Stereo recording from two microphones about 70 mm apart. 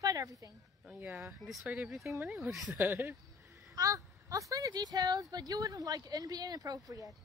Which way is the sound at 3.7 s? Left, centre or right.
Right.